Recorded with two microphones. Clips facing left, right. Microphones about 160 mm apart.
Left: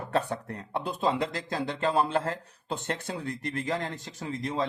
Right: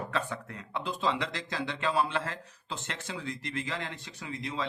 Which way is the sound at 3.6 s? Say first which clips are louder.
Left 6 dB; 40° left (ahead or behind).